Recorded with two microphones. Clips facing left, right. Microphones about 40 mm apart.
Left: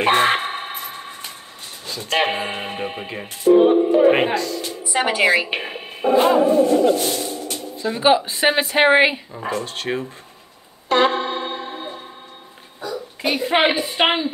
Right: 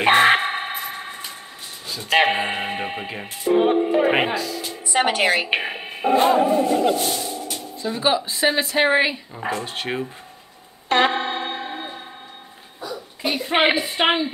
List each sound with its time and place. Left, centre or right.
0.0 s music: centre
1.9 s speech: centre
3.5 s music: centre
4.1 s speech: centre
4.9 s a woman's voice: right
5.5 s a sound: centre
6.2 s speech: centre
7.0 s speech: centre
7.2 s a sound: centre
8.0 s a woman's voice: left
9.4 s speech: centre
10.9 s music: right
13.3 s a woman's voice: centre
13.6 s speech: centre